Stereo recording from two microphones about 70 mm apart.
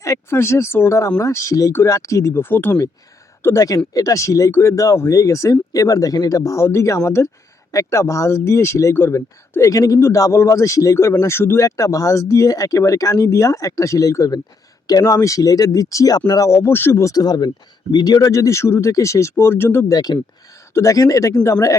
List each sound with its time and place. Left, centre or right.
0.0 s speech: left
3.5 s speech: left
11.3 s speech: left
11.6 s speech: left
16.5 s speech: left
17.0 s speech: left
17.9 s speech: left
18.3 s speech: left
19.9 s speech: left
20.7 s speech: left